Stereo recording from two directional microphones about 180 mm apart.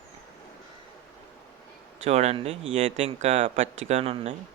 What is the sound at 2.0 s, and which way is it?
Speech, 35° right (ahead or behind).